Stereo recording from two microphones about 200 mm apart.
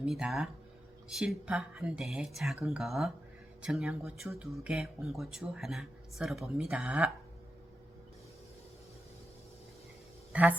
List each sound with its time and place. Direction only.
0.0 s speech: centre (ahead or behind)
10.3 s speech: 5° right (ahead or behind)